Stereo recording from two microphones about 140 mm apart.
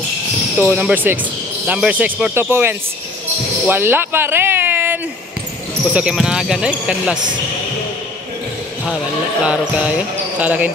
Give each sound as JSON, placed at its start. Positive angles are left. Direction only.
{"t": 0.7, "sound": "speech", "side_deg": -10}
{"t": 8.8, "sound": "speech", "side_deg": -5}